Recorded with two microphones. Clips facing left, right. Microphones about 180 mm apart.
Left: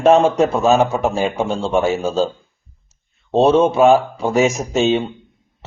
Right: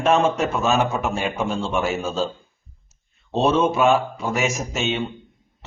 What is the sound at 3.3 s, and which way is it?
A man's voice, 30° left (ahead or behind).